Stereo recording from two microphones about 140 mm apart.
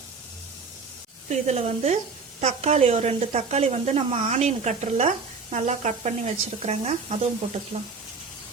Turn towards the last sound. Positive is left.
turn(degrees=-50)  # may be behind; listen again after turning